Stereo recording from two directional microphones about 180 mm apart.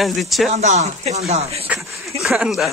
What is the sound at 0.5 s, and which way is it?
Speech, 40° right (ahead or behind).